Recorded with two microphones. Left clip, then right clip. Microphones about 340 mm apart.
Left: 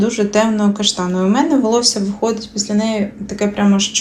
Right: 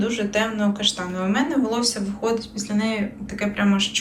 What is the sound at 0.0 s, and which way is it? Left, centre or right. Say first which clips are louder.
Speech: left 8 dB; centre.